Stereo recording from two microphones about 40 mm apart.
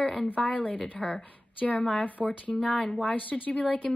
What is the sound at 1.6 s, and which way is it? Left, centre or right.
Speech, left.